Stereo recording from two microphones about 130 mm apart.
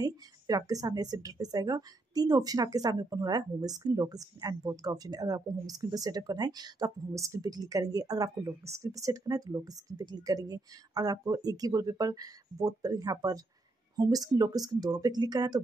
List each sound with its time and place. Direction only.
0.0 s speech: 30° right (ahead or behind)